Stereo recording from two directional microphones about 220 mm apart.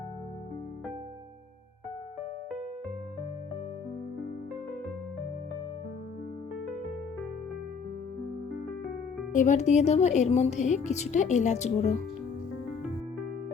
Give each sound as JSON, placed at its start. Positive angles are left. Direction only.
{"t": 9.3, "sound": "a woman's voice", "side_deg": 35}